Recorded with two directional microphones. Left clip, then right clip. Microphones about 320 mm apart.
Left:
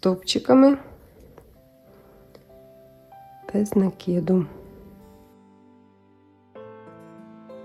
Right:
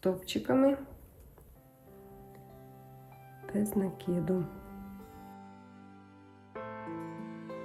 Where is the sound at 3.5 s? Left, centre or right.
Centre.